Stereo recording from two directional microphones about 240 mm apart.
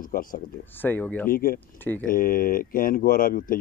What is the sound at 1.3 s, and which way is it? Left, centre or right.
Speech, left.